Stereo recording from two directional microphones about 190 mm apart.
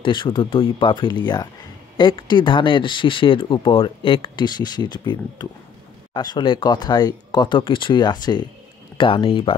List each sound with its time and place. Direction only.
0.0 s speech: 25° left (ahead or behind)